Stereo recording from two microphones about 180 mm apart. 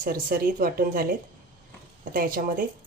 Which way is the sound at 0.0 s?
50° right (ahead or behind).